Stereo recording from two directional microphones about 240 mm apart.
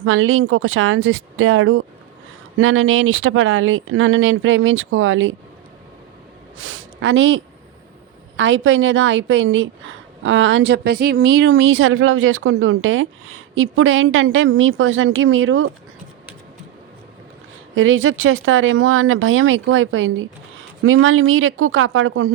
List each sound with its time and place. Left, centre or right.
0.0 s speech: right
6.6 s a woman's voice: right
17.7 s speech: right